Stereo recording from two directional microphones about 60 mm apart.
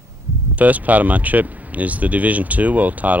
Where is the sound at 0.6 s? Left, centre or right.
Right.